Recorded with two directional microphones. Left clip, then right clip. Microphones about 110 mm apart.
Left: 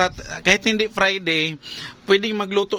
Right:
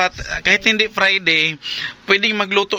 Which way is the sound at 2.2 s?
20° left (ahead or behind).